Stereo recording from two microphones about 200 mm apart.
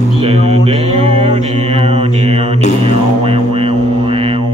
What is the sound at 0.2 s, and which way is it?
Mantra, 30° right (ahead or behind).